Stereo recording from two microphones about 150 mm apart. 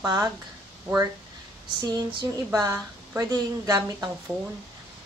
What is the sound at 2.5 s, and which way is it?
A woman's voice, 25° right (ahead or behind).